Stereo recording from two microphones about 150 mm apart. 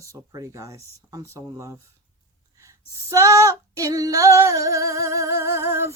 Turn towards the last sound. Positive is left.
turn(degrees=-15)  # may be behind; listen again after turning